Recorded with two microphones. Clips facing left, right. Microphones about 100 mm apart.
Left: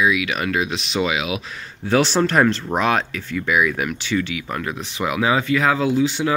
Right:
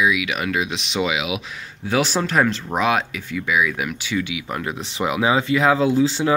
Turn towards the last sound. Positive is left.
turn(degrees=-30)  # may be behind; listen again after turning